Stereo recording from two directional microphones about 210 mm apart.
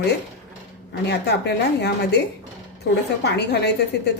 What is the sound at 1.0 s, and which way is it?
A woman's voice, 55° left (ahead or behind).